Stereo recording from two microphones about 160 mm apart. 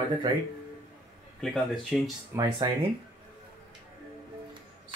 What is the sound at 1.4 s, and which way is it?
Speech, centre (ahead or behind).